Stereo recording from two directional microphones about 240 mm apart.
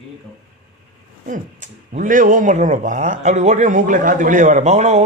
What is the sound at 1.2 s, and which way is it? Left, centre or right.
Speech, right.